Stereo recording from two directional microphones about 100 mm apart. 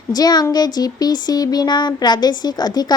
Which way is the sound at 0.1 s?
45° left (ahead or behind).